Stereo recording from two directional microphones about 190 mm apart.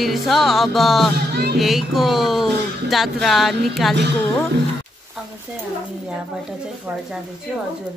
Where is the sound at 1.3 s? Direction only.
60° right (ahead or behind).